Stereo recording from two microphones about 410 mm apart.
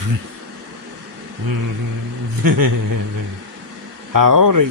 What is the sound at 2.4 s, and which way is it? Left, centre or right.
Speech, right.